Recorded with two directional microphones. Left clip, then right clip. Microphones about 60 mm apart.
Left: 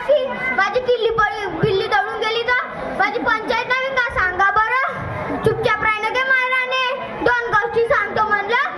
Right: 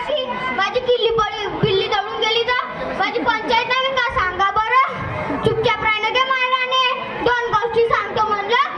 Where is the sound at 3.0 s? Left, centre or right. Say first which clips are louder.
Left 1 dB; left.